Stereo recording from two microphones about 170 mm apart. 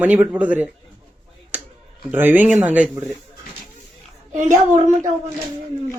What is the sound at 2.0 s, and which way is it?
Speech, 10° right (ahead or behind).